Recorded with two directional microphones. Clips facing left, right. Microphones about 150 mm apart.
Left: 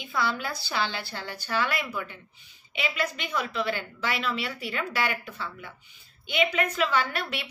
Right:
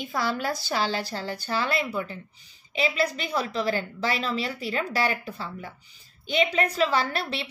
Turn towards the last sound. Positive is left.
turn(degrees=-30)  # may be behind; listen again after turning